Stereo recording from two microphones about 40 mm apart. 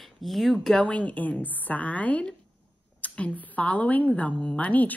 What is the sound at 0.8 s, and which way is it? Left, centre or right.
A woman's voice, left.